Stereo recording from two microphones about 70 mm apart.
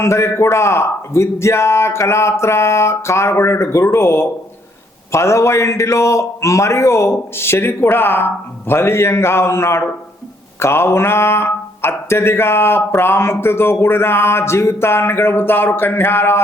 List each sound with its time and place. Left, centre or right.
0.0 s speech: left